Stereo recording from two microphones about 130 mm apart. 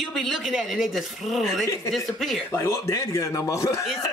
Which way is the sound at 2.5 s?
20° left (ahead or behind).